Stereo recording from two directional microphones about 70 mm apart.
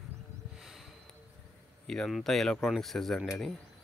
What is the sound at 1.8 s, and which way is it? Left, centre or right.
Speech, centre.